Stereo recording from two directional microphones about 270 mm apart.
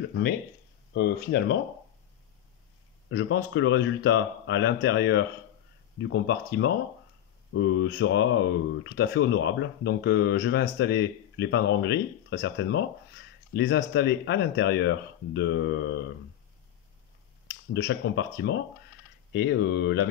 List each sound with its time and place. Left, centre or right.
0.9 s speech: left
3.1 s speech: left
17.5 s speech: left